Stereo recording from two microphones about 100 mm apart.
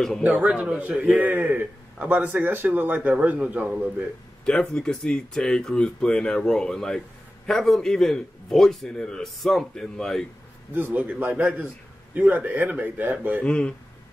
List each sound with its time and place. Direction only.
0.2 s a man's voice: 10° right (ahead or behind)
4.5 s a man's voice: 10° left (ahead or behind)
10.7 s a man's voice: 15° right (ahead or behind)
13.4 s speech: 10° left (ahead or behind)